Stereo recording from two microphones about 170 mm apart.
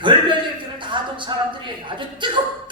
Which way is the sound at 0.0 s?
30° right (ahead or behind).